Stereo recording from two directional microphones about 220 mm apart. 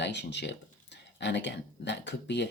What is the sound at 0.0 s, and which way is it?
Speech, 50° left (ahead or behind).